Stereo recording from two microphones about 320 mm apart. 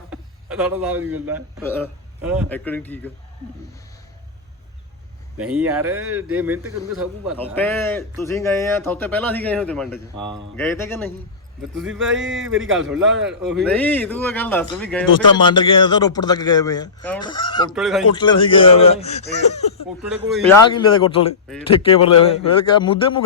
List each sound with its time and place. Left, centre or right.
0.1 s a sound: centre
1.6 s a man's voice: centre
5.4 s a man's voice: centre
5.9 s speech: right
6.3 s a man's voice: centre
11.9 s speech: right
13.2 s a man's voice: centre
17.7 s a man's voice: centre
18.1 s speech: centre
20.0 s a man's voice: centre
20.5 s speech: centre